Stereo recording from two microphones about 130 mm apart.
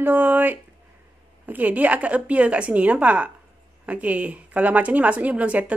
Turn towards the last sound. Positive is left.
turn(degrees=-10)  # may be behind; listen again after turning